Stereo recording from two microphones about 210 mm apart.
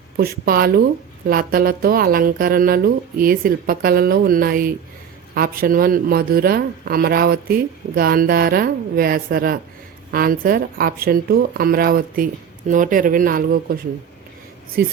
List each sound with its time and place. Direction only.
0.2 s speech: 45° right (ahead or behind)